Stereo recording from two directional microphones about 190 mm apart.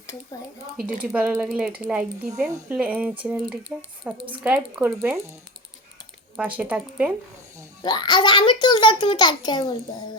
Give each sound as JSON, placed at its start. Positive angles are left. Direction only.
{"t": 1.0, "sound": "speech", "side_deg": -5}
{"t": 6.3, "sound": "speech", "side_deg": -5}
{"t": 7.8, "sound": "a child's voice", "side_deg": 20}